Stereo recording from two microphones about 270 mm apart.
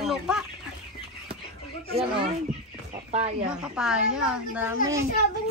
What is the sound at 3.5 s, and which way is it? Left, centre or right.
A man's voice, centre.